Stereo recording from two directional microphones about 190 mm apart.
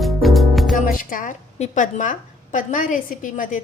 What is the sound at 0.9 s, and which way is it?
A woman's voice, 45° left (ahead or behind).